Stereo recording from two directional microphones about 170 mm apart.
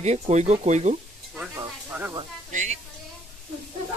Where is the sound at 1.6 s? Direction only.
10° right (ahead or behind).